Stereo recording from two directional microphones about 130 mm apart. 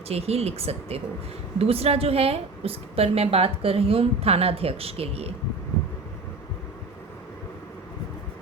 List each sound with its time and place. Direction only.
0.1 s a woman's voice: 50° right (ahead or behind)